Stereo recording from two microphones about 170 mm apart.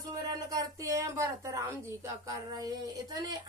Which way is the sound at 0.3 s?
20° right (ahead or behind).